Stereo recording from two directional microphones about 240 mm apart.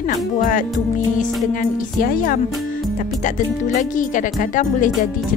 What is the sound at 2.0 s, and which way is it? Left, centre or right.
Speech, left.